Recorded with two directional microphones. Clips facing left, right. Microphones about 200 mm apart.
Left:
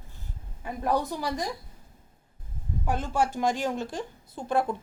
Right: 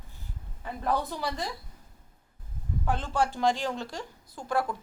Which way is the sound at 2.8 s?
15° left (ahead or behind).